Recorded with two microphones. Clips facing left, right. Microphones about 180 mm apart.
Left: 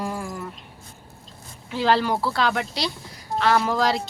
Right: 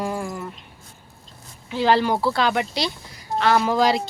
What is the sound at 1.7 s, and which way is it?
Speech, centre (ahead or behind).